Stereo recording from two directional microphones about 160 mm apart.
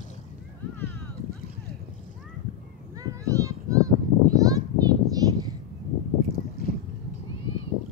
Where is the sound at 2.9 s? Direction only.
20° right (ahead or behind).